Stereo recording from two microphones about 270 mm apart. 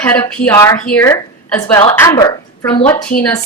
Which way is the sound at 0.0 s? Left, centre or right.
Centre.